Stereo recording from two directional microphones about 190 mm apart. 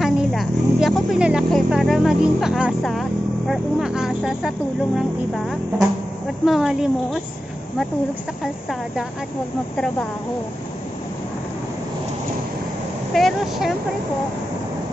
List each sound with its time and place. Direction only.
0.0 s speech: centre (ahead or behind)
13.1 s speech: centre (ahead or behind)